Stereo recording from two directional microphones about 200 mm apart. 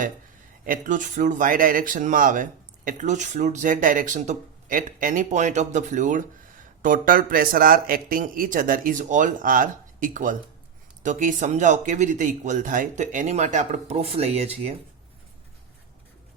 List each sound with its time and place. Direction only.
0.6 s speech: 40° right (ahead or behind)